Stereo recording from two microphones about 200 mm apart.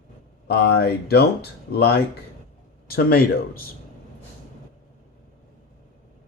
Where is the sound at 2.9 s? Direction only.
50° left (ahead or behind).